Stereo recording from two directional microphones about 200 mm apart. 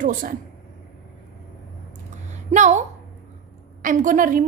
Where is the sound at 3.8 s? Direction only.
40° right (ahead or behind).